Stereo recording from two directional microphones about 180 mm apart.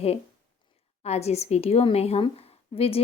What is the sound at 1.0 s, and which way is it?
Speech, 35° left (ahead or behind).